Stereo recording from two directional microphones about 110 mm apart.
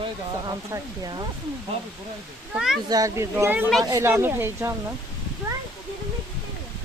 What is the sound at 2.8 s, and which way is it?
Speech, 35° right (ahead or behind).